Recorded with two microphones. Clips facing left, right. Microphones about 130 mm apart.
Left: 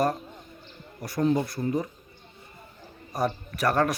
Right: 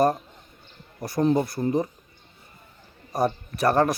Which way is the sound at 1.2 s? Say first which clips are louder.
Right 3 dB; 25° right (ahead or behind).